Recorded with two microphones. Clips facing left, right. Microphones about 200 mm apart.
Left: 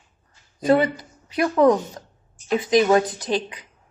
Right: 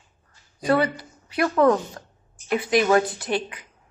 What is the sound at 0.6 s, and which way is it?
A woman's voice, 20° left (ahead or behind).